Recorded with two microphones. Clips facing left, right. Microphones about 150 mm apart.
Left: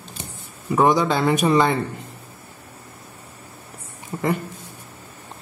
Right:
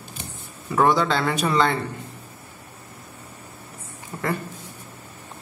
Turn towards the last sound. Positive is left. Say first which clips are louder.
# left 4 dB
turn(degrees=15)  # may be behind; listen again after turning